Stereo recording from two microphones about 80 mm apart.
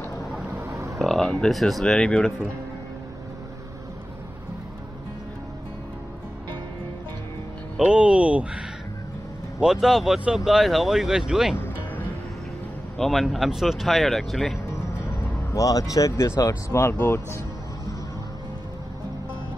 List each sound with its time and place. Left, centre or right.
0.7 s a sound: right
0.9 s a sound: centre
1.4 s speech: centre
7.8 s speech: centre
9.6 s speech: centre
11.5 s music: left
12.9 s speech: centre
14.7 s music: left
16.9 s speech: left